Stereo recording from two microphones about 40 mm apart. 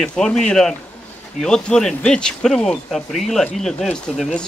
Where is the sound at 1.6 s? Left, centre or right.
Centre.